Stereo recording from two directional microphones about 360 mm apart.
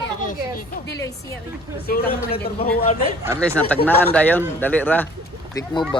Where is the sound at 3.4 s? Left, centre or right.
Centre.